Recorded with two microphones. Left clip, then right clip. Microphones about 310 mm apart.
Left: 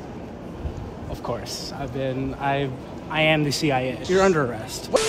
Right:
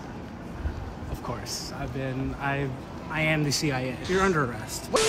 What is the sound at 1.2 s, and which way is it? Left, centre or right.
Speech, centre.